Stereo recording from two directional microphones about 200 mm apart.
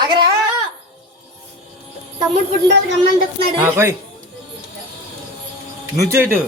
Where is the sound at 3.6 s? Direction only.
10° right (ahead or behind).